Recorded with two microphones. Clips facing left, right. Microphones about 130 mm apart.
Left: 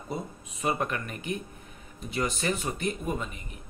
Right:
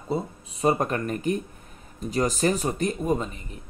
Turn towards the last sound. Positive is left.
turn(degrees=-35)  # may be behind; listen again after turning